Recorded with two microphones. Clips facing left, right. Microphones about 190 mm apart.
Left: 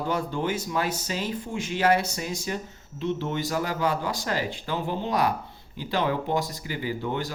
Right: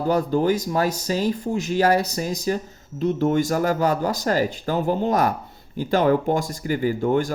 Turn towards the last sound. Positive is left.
turn(degrees=-45)  # may be behind; listen again after turning